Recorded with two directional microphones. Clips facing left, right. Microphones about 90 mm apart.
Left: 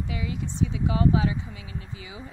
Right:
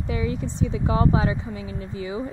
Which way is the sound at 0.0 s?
40° right (ahead or behind).